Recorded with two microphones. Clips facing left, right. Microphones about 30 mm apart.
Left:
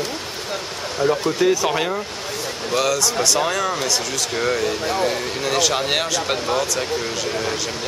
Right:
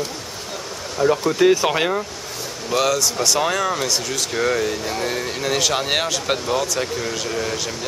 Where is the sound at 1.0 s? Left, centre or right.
Left.